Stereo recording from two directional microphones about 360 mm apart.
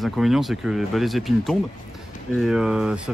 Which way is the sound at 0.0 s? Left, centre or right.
Centre.